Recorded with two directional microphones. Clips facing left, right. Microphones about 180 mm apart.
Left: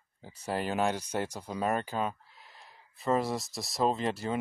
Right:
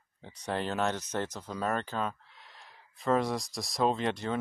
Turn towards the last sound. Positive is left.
turn(degrees=5)  # may be behind; listen again after turning